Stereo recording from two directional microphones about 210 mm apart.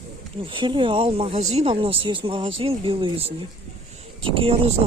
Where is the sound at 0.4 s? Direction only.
25° right (ahead or behind).